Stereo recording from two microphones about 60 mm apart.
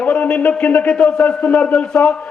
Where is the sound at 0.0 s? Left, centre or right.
Left.